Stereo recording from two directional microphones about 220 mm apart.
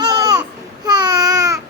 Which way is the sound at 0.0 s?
15° right (ahead or behind).